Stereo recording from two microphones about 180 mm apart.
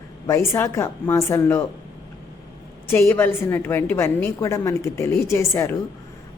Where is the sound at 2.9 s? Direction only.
15° left (ahead or behind).